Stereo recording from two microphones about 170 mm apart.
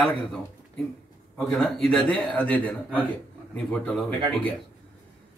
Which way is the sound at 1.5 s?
Centre (ahead or behind).